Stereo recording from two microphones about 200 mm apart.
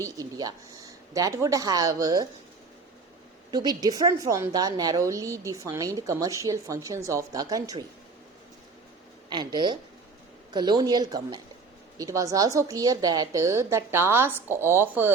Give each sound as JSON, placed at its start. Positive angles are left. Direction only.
{"t": 0.0, "sound": "a woman's voice", "side_deg": -20}
{"t": 3.5, "sound": "a woman's voice", "side_deg": -20}
{"t": 9.3, "sound": "a woman's voice", "side_deg": -20}